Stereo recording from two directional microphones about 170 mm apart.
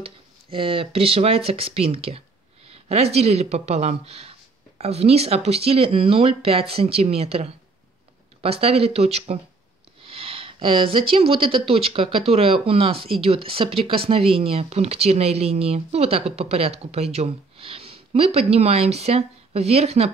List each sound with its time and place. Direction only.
0.0 s speech: 30° right (ahead or behind)